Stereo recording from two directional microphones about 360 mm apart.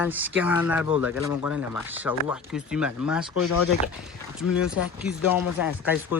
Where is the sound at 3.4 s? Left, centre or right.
Left.